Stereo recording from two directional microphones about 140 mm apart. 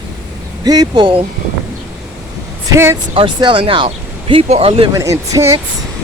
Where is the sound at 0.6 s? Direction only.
30° right (ahead or behind).